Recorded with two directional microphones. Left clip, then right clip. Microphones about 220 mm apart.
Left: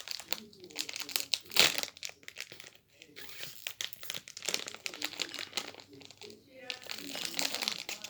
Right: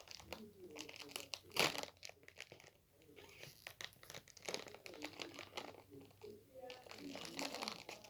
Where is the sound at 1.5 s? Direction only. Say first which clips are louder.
Left 11 dB; 50° left (ahead or behind).